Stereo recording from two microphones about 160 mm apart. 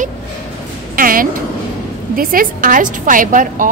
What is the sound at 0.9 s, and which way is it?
A woman's voice, 60° right (ahead or behind).